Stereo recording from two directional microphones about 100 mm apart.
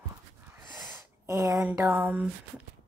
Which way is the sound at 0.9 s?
30° right (ahead or behind).